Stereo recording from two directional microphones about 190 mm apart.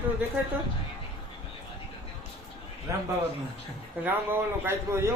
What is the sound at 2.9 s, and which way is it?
A man's voice, 15° right (ahead or behind).